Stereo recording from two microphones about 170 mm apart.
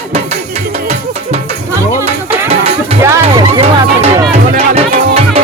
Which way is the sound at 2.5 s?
35° right (ahead or behind).